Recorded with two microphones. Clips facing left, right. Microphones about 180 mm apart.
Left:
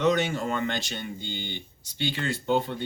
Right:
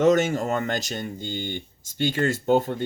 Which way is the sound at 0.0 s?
45° right (ahead or behind).